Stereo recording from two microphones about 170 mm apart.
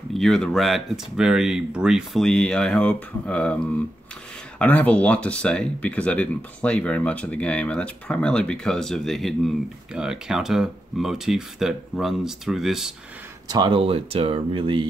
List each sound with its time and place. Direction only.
0.1 s speech: 5° left (ahead or behind)
13.5 s speech: 30° right (ahead or behind)